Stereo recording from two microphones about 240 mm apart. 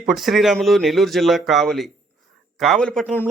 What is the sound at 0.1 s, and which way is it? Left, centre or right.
A man's voice, centre.